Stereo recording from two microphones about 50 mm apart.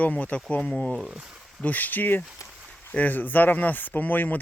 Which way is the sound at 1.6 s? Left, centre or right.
Left.